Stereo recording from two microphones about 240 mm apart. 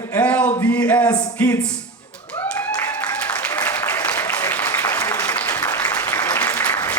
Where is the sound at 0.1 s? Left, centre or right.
Centre.